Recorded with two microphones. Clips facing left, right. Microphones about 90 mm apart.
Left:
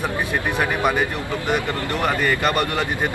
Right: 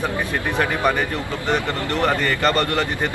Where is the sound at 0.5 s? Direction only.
15° left (ahead or behind).